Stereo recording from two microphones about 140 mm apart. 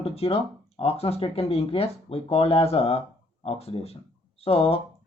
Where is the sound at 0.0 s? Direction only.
45° left (ahead or behind).